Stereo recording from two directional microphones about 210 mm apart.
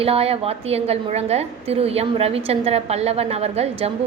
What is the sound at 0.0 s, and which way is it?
A woman's voice, 30° right (ahead or behind).